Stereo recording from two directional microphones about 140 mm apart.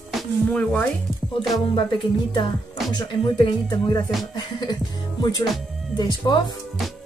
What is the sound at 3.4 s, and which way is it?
A woman's voice, 30° left (ahead or behind).